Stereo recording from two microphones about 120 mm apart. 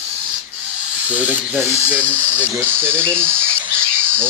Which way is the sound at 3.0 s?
10° left (ahead or behind).